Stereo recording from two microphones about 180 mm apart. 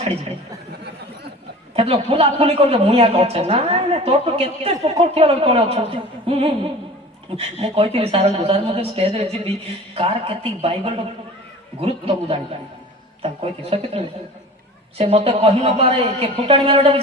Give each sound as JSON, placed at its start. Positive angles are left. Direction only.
{"t": 1.7, "sound": "a man's voice", "side_deg": -35}
{"t": 6.2, "sound": "music", "side_deg": -35}
{"t": 7.3, "sound": "a man's voice", "side_deg": -30}